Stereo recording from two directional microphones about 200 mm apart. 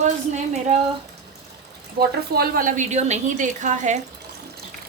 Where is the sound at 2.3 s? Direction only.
45° right (ahead or behind).